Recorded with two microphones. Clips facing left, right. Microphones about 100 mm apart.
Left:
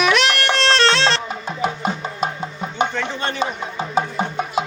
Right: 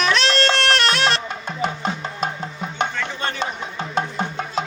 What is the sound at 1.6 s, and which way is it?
Music, 5° left (ahead or behind).